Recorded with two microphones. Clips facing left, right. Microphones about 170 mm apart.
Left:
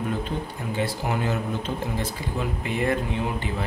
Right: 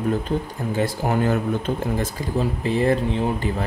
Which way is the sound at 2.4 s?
35° right (ahead or behind).